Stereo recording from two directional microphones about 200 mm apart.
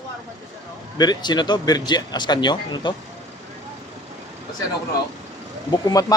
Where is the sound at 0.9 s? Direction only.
20° left (ahead or behind).